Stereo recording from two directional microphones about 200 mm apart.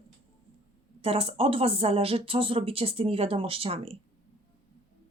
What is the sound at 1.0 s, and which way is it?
Speech, 30° right (ahead or behind).